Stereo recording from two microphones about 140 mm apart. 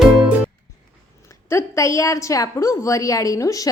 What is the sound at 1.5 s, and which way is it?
A woman's voice, 20° left (ahead or behind).